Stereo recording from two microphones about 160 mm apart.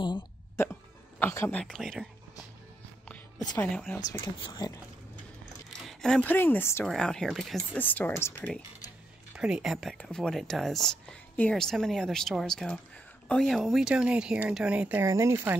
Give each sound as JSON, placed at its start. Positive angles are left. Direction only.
{"t": 0.6, "sound": "hiccup", "side_deg": 15}
{"t": 1.2, "sound": "speech", "side_deg": 15}
{"t": 1.6, "sound": "speech", "side_deg": 5}
{"t": 3.1, "sound": "a woman's voice", "side_deg": 5}
{"t": 4.4, "sound": "speech", "side_deg": 25}
{"t": 5.9, "sound": "a woman's voice", "side_deg": 5}
{"t": 9.3, "sound": "speech", "side_deg": -5}